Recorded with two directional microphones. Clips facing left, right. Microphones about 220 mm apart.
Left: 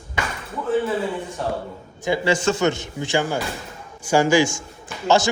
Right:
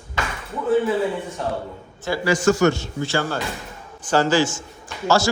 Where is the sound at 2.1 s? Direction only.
25° left (ahead or behind).